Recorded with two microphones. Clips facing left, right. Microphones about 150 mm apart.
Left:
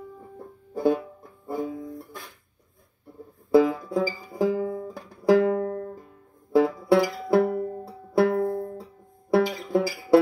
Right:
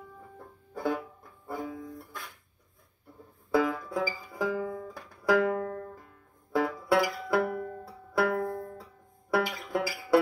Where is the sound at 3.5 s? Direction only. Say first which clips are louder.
Left 8 dB; 35° left (ahead or behind).